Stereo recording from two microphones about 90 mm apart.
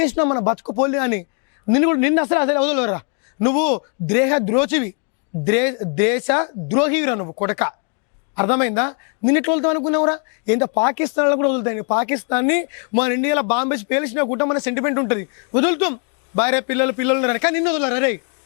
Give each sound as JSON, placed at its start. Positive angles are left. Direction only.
{"t": 0.0, "sound": "speech", "side_deg": 15}